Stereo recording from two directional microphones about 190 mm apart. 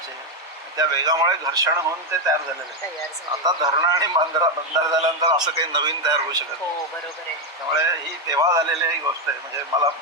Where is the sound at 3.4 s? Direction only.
20° right (ahead or behind).